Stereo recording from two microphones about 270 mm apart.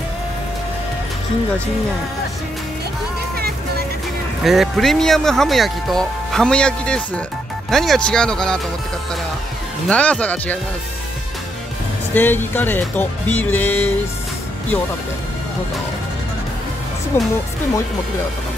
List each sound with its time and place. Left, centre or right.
3.3 s music: right
4.5 s speech: centre
9.8 s speech: centre
12.1 s speech: centre
17.1 s speech: centre